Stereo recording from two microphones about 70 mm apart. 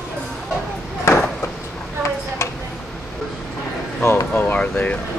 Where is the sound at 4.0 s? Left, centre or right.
Left.